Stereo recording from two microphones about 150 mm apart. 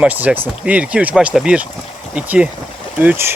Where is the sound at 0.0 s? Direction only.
5° right (ahead or behind).